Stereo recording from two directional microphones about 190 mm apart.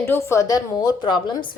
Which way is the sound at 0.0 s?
15° left (ahead or behind).